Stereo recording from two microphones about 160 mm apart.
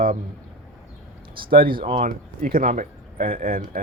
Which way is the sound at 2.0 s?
60° right (ahead or behind).